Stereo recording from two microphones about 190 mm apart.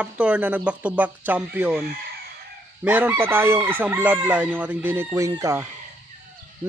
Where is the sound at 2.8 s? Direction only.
10° right (ahead or behind).